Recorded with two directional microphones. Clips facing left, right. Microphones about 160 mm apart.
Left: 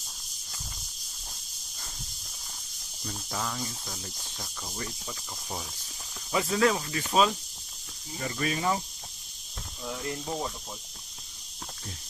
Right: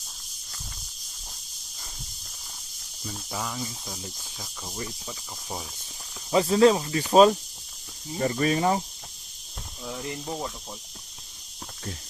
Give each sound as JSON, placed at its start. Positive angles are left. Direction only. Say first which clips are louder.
{"t": 3.0, "sound": "cricket", "louder": "right 1 dB", "side_deg": -5}
{"t": 6.3, "sound": "speech", "louder": "right 7 dB", "side_deg": -30}
{"t": 7.1, "sound": "speech", "louder": "right 8 dB", "side_deg": -40}
{"t": 10.1, "sound": "speech", "louder": "left 1 dB", "side_deg": 0}